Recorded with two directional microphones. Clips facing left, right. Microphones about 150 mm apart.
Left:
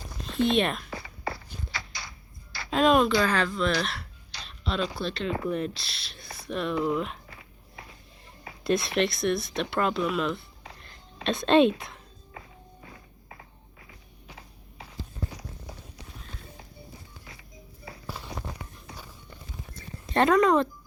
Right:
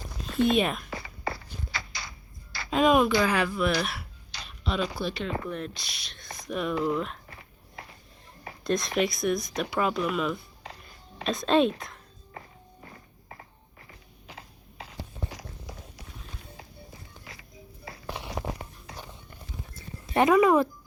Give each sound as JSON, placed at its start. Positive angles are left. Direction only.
{"t": 0.4, "sound": "speech", "side_deg": -5}
{"t": 2.6, "sound": "speech", "side_deg": 0}
{"t": 8.6, "sound": "speech", "side_deg": 5}
{"t": 10.8, "sound": "music", "side_deg": 0}
{"t": 19.7, "sound": "a sound", "side_deg": -5}